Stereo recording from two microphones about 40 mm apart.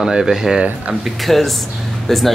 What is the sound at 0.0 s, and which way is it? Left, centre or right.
Speech, centre.